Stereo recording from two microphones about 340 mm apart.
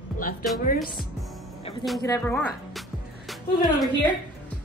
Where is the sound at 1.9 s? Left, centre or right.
Centre.